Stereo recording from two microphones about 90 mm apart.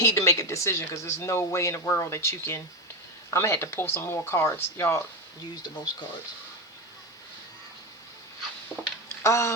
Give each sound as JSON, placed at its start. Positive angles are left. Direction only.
{"t": 0.0, "sound": "speech", "side_deg": 40}
{"t": 5.6, "sound": "speech", "side_deg": 50}
{"t": 9.2, "sound": "speech", "side_deg": 30}